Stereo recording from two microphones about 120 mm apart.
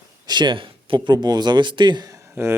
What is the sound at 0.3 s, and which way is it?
Speech, 40° right (ahead or behind).